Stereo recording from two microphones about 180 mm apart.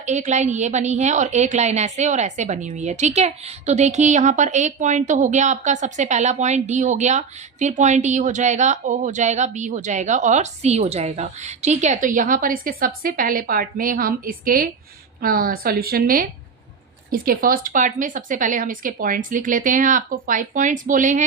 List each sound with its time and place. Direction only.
0.0 s a woman's voice: 40° right (ahead or behind)